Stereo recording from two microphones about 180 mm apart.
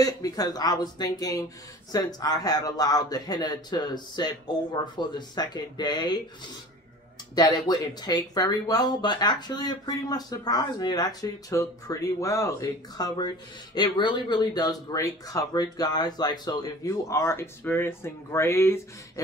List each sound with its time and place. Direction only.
0.0 s speech: 20° left (ahead or behind)
7.3 s speech: 20° left (ahead or behind)